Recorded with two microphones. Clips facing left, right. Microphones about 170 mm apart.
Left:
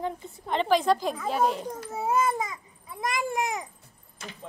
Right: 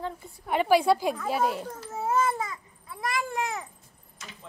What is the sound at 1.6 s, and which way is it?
A child's voice, 15° left (ahead or behind).